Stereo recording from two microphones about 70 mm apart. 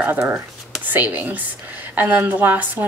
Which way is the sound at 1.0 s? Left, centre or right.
Right.